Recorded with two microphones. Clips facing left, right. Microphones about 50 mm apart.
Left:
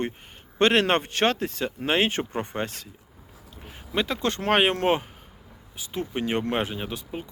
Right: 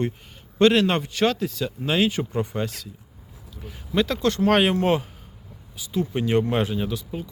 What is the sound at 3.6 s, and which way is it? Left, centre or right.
Speech, left.